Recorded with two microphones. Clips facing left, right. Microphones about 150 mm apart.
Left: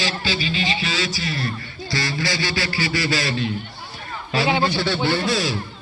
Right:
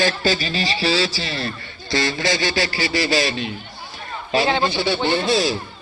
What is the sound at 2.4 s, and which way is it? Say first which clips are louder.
Speech: right 3 dB; 45° right (ahead or behind).